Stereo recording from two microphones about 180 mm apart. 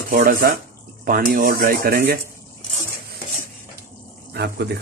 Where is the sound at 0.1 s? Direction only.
50° right (ahead or behind).